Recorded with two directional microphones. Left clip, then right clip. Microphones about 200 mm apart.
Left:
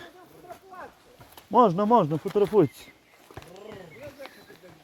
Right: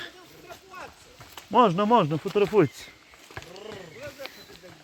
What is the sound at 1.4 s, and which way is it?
Speech, 10° left (ahead or behind).